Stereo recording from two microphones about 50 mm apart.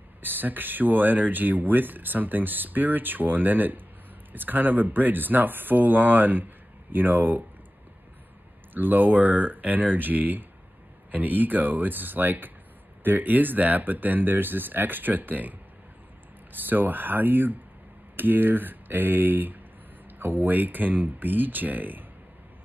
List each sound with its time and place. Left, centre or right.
0.2 s speech: right
8.7 s speech: right
16.5 s speech: right